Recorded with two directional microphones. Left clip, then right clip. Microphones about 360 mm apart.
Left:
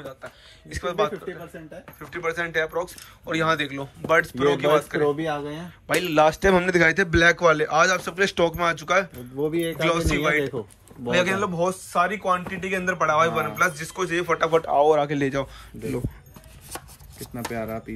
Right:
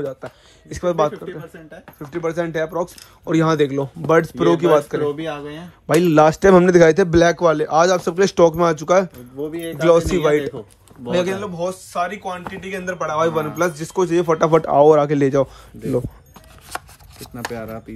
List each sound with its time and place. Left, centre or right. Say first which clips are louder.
0.7 s speech: right 6 dB; centre
5.1 s speech: even; centre
6.1 s speech: right 6 dB; right
16.7 s speech: right 8 dB; centre